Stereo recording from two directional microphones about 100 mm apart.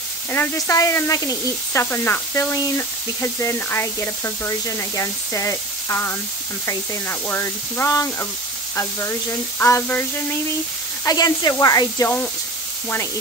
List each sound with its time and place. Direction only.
0.3 s speech: 20° left (ahead or behind)
11.1 s speech: 40° left (ahead or behind)